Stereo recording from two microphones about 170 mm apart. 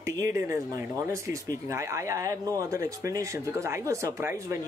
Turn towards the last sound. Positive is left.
turn(degrees=-15)  # may be behind; listen again after turning